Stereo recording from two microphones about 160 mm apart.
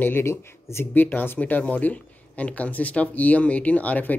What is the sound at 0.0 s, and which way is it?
Speech, 15° left (ahead or behind).